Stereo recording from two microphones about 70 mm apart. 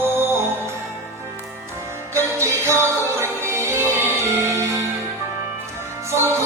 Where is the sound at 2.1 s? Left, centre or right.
Right.